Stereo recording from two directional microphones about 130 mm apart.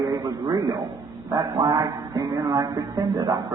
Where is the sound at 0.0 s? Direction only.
30° right (ahead or behind).